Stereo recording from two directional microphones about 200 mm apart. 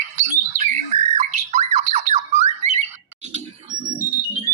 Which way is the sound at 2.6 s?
30° right (ahead or behind).